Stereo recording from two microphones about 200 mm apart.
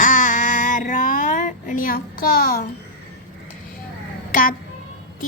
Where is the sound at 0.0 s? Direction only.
40° left (ahead or behind).